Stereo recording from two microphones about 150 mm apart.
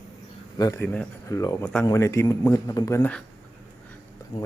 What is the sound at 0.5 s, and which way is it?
A man's voice, 25° left (ahead or behind).